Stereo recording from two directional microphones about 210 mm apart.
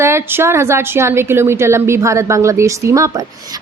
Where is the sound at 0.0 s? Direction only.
10° right (ahead or behind).